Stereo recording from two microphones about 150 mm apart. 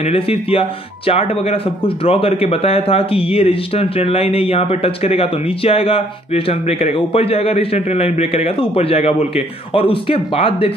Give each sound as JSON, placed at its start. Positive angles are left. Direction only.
{"t": 0.0, "sound": "speech", "side_deg": 40}